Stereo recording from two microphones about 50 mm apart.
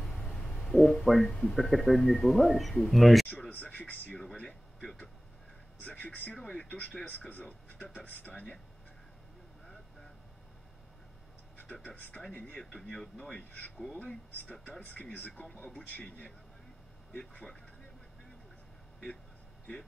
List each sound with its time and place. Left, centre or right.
0.0 s a sound: centre
0.7 s speech: centre
5.8 s speech: left
6.5 s speech: left
7.1 s speech: left
11.6 s speech: left
12.5 s speech: centre